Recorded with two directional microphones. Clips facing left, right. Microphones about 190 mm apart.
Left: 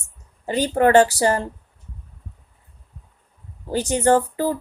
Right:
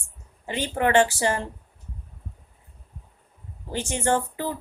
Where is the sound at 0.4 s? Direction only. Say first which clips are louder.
Left 7 dB; 40° left (ahead or behind).